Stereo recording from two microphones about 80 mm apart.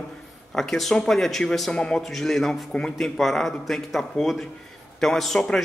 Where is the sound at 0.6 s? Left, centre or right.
Centre.